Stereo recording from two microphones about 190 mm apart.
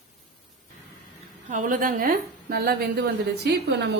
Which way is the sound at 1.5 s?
45° right (ahead or behind).